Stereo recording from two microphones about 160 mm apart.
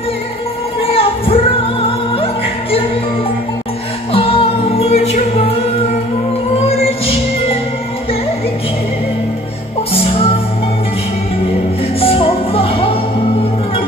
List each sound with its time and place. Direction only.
0.9 s music: 35° left (ahead or behind)
4.1 s music: 35° left (ahead or behind)
10.1 s music: 35° left (ahead or behind)
12.0 s music: 35° left (ahead or behind)